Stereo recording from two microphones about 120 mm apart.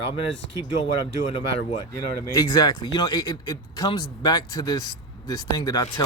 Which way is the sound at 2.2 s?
25° left (ahead or behind).